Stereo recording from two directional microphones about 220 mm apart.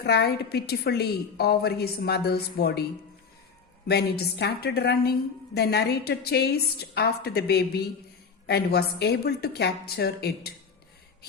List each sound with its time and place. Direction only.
0.0 s a woman's voice: 45° left (ahead or behind)
3.8 s a woman's voice: 50° left (ahead or behind)